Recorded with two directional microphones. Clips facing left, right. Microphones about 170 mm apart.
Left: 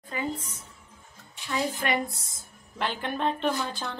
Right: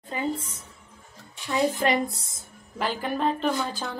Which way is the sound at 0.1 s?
25° right (ahead or behind).